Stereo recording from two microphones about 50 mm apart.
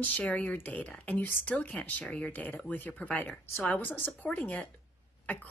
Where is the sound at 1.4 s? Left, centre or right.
Left.